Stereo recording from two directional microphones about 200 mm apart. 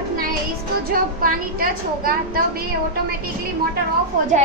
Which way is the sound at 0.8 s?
45° right (ahead or behind).